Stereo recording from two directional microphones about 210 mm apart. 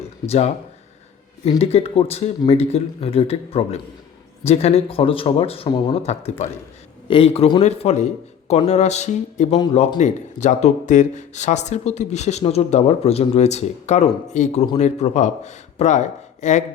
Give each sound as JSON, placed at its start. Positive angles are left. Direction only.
{"t": 0.3, "sound": "a man's voice", "side_deg": 30}